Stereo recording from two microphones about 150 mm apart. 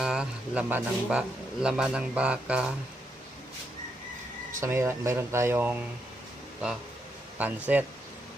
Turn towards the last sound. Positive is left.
turn(degrees=-10)  # may be behind; listen again after turning